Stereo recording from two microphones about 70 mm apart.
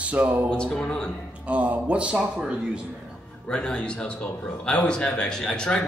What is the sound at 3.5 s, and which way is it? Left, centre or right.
Speech, centre.